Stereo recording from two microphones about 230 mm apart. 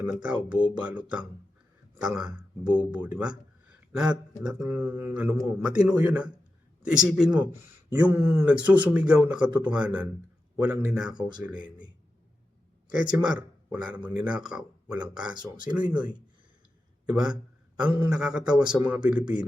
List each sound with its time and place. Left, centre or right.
0.0 s speech: centre
13.0 s speech: centre
15.4 s speech: centre
17.1 s speech: centre